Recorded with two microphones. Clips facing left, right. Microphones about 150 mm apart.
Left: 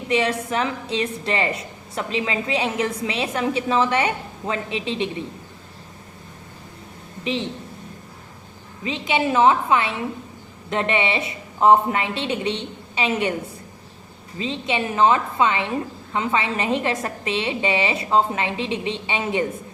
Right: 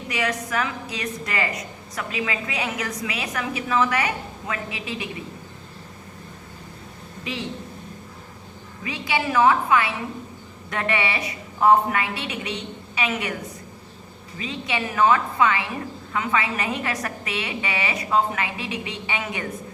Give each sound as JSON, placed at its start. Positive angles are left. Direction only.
{"t": 0.1, "sound": "a woman's voice", "side_deg": 25}
{"t": 8.8, "sound": "a woman's voice", "side_deg": 20}
{"t": 14.3, "sound": "a woman's voice", "side_deg": 25}